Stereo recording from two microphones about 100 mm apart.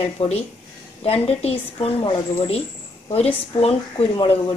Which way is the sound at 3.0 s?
90° left.